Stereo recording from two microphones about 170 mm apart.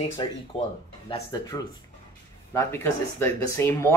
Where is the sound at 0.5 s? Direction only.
35° left (ahead or behind).